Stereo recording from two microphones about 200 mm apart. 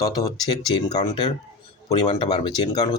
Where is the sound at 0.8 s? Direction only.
20° left (ahead or behind).